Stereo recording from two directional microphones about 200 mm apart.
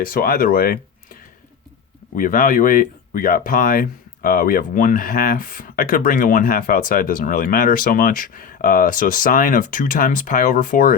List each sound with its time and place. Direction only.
0.0 s speech: 45° left (ahead or behind)
2.1 s speech: 40° left (ahead or behind)